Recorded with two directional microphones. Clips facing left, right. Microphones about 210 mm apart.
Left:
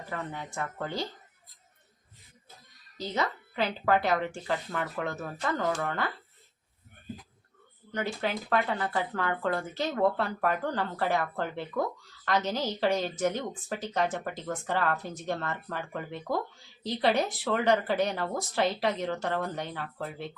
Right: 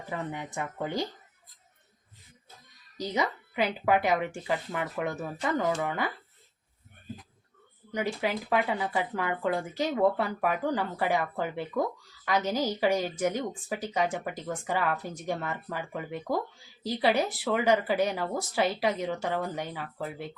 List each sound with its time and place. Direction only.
0.1 s speech: 15° right (ahead or behind)
3.0 s speech: 15° right (ahead or behind)
7.9 s speech: 10° right (ahead or behind)